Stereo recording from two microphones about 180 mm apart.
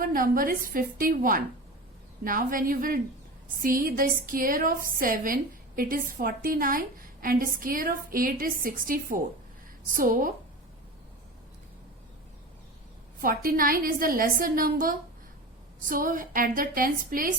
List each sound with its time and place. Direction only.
0.0 s a woman's voice: 50° right (ahead or behind)
13.2 s a woman's voice: 50° right (ahead or behind)